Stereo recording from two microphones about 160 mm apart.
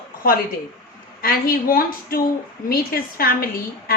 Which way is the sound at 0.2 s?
60° left (ahead or behind).